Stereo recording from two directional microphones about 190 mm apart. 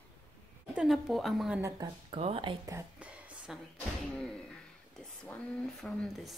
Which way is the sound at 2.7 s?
5° right (ahead or behind).